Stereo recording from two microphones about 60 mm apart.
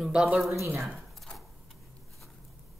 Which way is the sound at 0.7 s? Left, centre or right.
Centre.